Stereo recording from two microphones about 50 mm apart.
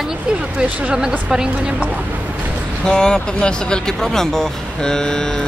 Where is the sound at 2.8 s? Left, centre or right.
Centre.